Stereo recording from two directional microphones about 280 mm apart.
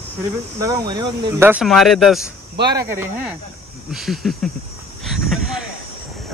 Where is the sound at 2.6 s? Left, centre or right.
Centre.